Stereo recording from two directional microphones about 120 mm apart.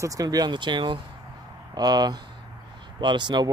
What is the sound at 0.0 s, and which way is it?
Speech, 30° right (ahead or behind).